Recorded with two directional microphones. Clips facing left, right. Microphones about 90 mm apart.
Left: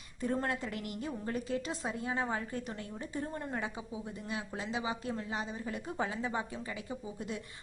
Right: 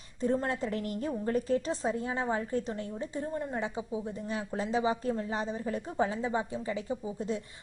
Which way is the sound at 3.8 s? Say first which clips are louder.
Right 7 dB; 35° right (ahead or behind).